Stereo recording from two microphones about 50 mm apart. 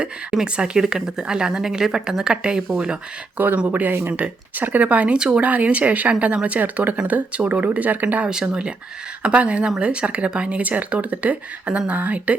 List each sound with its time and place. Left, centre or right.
0.0 s speech: centre
3.3 s speech: right
5.1 s speech: centre
5.4 s speech: right
8.3 s speech: centre